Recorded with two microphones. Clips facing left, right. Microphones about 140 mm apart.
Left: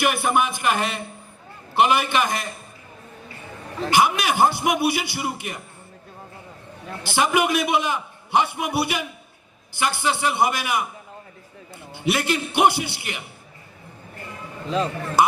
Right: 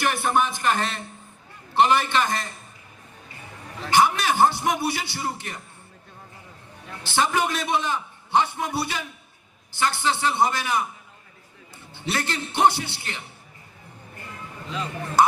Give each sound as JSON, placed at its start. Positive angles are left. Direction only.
{"t": 0.0, "sound": "a man's voice", "side_deg": 10}
{"t": 3.9, "sound": "a man's voice", "side_deg": 10}
{"t": 7.0, "sound": "a man's voice", "side_deg": 10}
{"t": 11.9, "sound": "a man's voice", "side_deg": 10}